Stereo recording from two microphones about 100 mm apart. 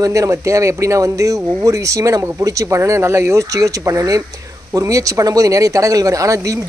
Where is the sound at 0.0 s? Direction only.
35° right (ahead or behind).